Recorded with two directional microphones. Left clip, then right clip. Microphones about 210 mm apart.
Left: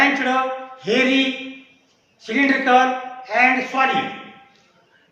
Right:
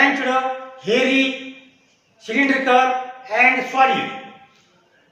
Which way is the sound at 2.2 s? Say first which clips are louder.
Even; 15° left (ahead or behind).